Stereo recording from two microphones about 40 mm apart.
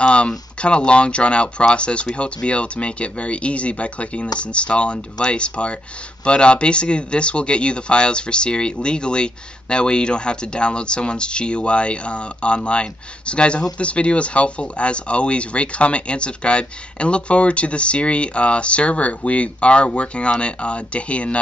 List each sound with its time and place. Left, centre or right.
0.0 s speech: left